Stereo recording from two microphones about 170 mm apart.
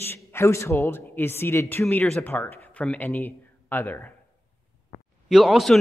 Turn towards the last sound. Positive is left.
turn(degrees=0)  # may be behind; listen again after turning